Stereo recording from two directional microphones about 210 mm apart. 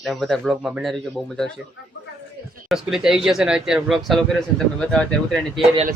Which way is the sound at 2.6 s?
Centre (ahead or behind).